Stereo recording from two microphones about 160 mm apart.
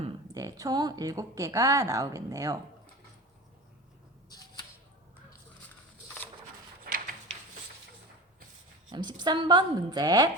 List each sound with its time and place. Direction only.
0.3 s a woman's voice: 20° right (ahead or behind)
6.8 s a sound: 60° right (ahead or behind)
8.9 s a woman's voice: 30° right (ahead or behind)